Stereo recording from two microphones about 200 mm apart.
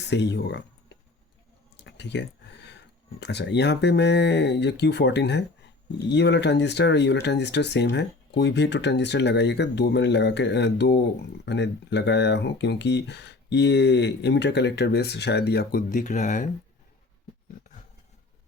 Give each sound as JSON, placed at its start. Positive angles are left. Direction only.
{"t": 0.0, "sound": "speech", "side_deg": 60}
{"t": 1.7, "sound": "a sound", "side_deg": 60}
{"t": 3.2, "sound": "speech", "side_deg": 60}